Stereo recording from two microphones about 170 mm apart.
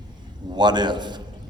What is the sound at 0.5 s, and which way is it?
Speech, 25° right (ahead or behind).